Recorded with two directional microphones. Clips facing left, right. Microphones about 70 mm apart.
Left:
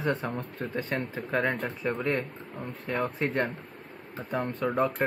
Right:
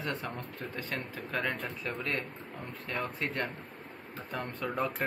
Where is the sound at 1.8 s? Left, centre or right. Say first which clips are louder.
Left 8 dB; centre.